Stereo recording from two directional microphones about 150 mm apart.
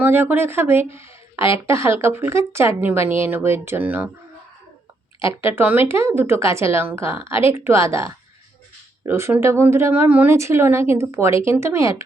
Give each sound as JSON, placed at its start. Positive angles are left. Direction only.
{"t": 0.0, "sound": "a woman's voice", "side_deg": -15}
{"t": 5.5, "sound": "a woman's voice", "side_deg": -15}